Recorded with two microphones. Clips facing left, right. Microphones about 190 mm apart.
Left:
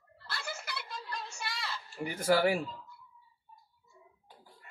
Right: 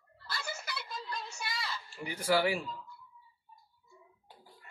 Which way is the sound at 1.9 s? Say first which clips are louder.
Left 2 dB; 45° left (ahead or behind).